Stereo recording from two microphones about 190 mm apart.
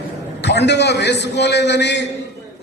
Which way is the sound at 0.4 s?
65° left (ahead or behind).